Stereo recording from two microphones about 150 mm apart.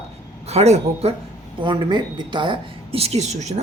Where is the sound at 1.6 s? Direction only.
30° right (ahead or behind).